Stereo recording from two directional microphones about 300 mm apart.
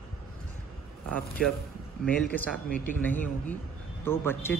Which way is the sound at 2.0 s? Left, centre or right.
Centre.